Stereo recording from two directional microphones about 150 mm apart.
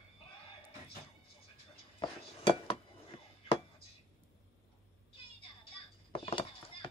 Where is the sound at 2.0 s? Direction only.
35° left (ahead or behind).